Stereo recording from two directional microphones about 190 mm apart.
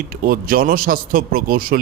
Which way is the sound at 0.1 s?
50° right (ahead or behind).